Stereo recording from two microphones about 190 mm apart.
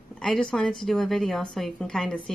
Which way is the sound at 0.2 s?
5° left (ahead or behind).